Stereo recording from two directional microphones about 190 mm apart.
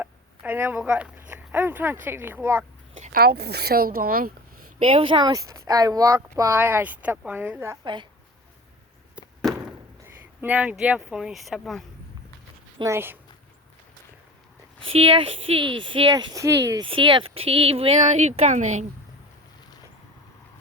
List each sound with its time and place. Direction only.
0.0 s speech: 10° right (ahead or behind)
3.0 s speech: 50° right (ahead or behind)
4.8 s speech: 30° right (ahead or behind); by 7.8 s 10° right (ahead or behind)
9.1 s chop: centre (ahead or behind)
10.4 s speech: 10° right (ahead or behind)
12.8 s speech: 15° right (ahead or behind)
14.9 s speech: 25° right (ahead or behind)